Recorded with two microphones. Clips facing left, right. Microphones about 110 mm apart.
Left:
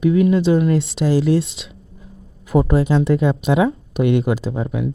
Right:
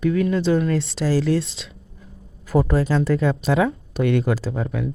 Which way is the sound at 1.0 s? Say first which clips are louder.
Left 3 dB; 15° left (ahead or behind).